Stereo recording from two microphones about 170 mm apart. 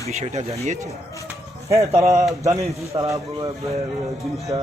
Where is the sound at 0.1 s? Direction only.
40° right (ahead or behind).